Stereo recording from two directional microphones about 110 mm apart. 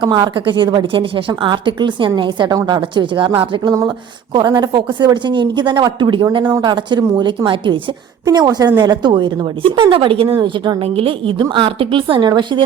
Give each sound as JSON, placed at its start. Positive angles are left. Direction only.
{"t": 0.0, "sound": "a woman's voice", "side_deg": -45}
{"t": 8.2, "sound": "a woman's voice", "side_deg": -35}